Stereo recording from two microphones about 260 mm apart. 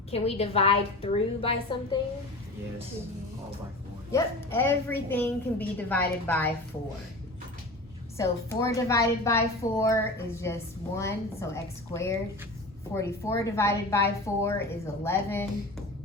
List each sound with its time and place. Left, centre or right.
0.1 s a woman's voice: left
4.1 s a woman's voice: centre
8.2 s a woman's voice: centre